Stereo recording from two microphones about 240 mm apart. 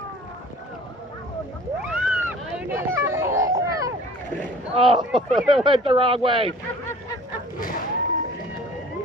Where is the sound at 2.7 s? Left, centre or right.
Centre.